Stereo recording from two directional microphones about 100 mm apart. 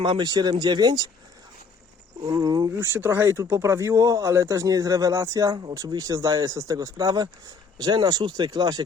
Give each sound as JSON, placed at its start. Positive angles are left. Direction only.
{"t": 0.0, "sound": "speech", "side_deg": -50}
{"t": 2.2, "sound": "speech", "side_deg": -45}
{"t": 2.6, "sound": "speech", "side_deg": -25}